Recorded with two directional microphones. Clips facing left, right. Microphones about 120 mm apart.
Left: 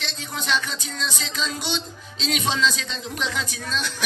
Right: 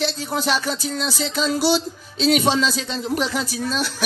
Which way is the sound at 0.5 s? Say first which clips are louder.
Right 2 dB; 35° right (ahead or behind).